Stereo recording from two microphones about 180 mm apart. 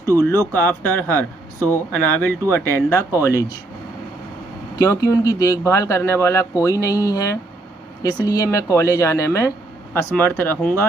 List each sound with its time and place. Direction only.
0.1 s speech: 15° left (ahead or behind)
4.7 s speech: 20° left (ahead or behind)